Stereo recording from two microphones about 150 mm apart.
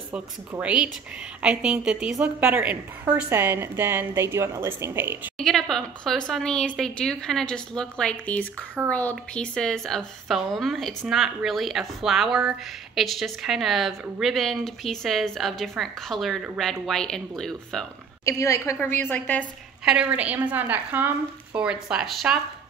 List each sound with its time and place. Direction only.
0.1 s a woman's voice: 10° right (ahead or behind)
5.4 s a woman's voice: centre (ahead or behind)
18.2 s a woman's voice: 20° left (ahead or behind)
19.8 s a woman's voice: 5° right (ahead or behind)